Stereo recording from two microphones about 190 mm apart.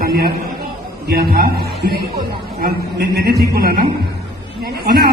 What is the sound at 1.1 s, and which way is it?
Speech, 55° right (ahead or behind).